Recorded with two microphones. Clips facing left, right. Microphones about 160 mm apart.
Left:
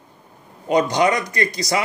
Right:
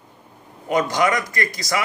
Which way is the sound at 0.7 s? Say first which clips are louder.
Left 2 dB; 25° left (ahead or behind).